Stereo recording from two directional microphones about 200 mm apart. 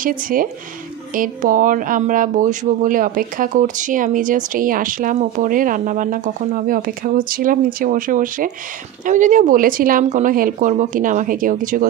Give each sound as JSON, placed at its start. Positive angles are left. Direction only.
{"t": 0.0, "sound": "speech", "side_deg": -45}